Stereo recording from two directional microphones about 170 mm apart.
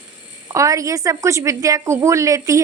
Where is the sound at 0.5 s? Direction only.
20° right (ahead or behind).